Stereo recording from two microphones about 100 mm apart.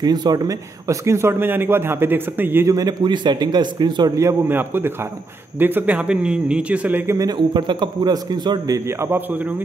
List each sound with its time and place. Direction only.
0.0 s speech: 40° right (ahead or behind); by 2.7 s 20° right (ahead or behind)
2.7 s speech: 40° right (ahead or behind)
4.2 s a man's voice: 25° right (ahead or behind)
7.3 s speech: 50° right (ahead or behind)
8.7 s speech: 25° right (ahead or behind)